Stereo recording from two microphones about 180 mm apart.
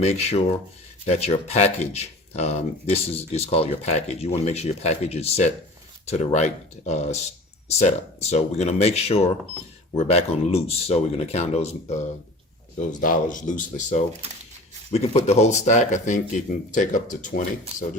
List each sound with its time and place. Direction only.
0.0 s speech: 35° left (ahead or behind)